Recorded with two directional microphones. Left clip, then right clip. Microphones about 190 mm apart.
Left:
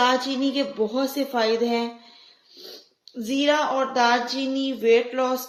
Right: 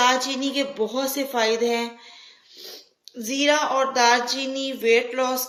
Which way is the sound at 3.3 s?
50° left (ahead or behind).